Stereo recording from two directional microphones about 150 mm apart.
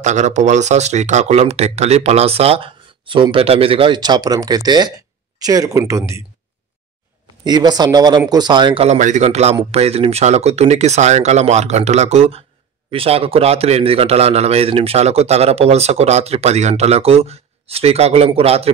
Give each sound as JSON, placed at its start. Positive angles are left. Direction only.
{"t": 0.0, "sound": "speech", "side_deg": -50}
{"t": 7.4, "sound": "speech", "side_deg": -25}
{"t": 8.8, "sound": "a man's voice", "side_deg": -50}